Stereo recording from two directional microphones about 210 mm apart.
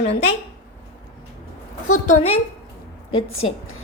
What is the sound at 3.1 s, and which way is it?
Speech, 75° left (ahead or behind).